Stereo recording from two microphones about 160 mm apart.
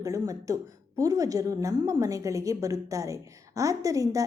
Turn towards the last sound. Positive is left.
turn(degrees=-20)  # may be behind; listen again after turning